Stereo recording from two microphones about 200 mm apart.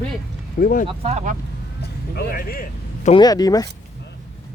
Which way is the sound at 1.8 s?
50° left (ahead or behind).